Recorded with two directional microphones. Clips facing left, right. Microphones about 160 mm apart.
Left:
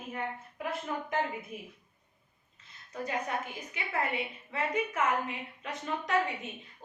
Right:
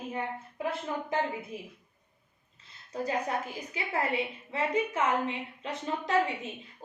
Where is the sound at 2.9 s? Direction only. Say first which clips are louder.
Right 3 dB; 35° right (ahead or behind).